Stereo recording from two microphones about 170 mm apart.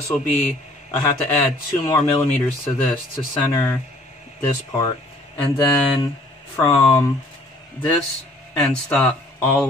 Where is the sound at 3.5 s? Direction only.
15° left (ahead or behind).